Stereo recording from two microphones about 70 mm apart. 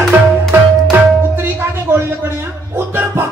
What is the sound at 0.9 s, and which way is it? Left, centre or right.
Music, right.